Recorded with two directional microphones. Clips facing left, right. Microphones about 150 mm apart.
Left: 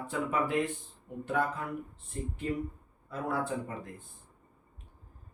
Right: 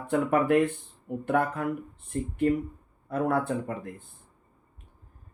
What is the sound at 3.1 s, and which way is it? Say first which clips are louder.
Speech: right 7 dB; 60° right (ahead or behind).